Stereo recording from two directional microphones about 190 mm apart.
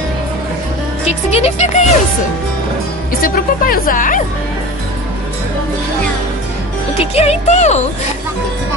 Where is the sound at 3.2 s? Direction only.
50° left (ahead or behind).